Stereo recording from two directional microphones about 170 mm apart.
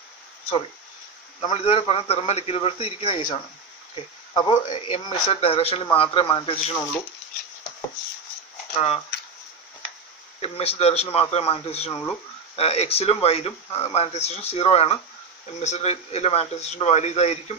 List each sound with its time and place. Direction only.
1.4 s speech: 35° left (ahead or behind)
3.9 s a sound: 30° left (ahead or behind)
4.6 s speech: 35° left (ahead or behind)
8.7 s speech: 35° left (ahead or behind)
10.4 s speech: 35° left (ahead or behind)
11.9 s speech: 15° left (ahead or behind)
12.5 s speech: 35° left (ahead or behind)